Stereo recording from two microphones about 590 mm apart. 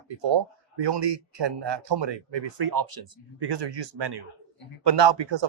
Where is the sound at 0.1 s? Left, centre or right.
Right.